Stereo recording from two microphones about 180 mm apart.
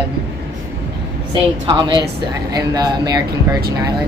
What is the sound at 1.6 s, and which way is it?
Speech, 25° right (ahead or behind).